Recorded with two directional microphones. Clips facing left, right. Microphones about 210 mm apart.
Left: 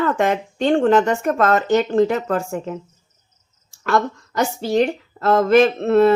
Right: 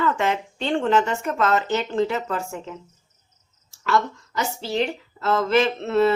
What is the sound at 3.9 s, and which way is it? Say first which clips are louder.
A woman's voice: left 3 dB; 50° left (ahead or behind).